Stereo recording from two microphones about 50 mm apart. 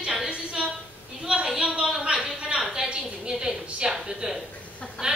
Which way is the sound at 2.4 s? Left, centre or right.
Centre.